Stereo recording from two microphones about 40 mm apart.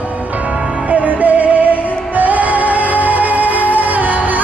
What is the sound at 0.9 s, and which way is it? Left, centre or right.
Music, right.